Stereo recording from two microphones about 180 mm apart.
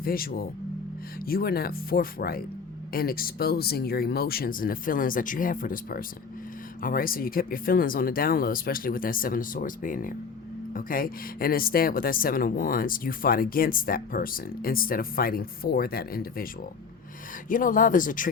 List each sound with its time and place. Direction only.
0.0 s speech: 55° left (ahead or behind)
17.5 s speech: 50° left (ahead or behind)